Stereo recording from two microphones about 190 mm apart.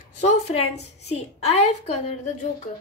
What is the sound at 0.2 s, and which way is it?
A woman's voice, 35° left (ahead or behind).